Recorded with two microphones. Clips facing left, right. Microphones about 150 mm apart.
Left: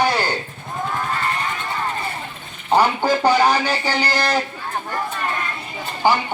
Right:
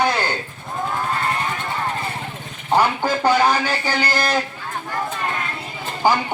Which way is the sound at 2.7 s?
15° left (ahead or behind).